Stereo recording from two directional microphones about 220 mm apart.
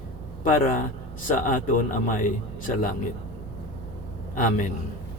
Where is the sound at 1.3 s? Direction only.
35° left (ahead or behind).